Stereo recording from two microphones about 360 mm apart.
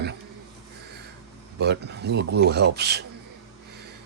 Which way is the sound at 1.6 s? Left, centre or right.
Right.